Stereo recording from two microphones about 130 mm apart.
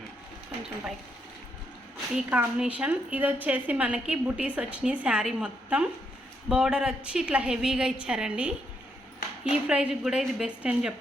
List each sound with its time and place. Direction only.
2.1 s a woman's voice: 10° right (ahead or behind)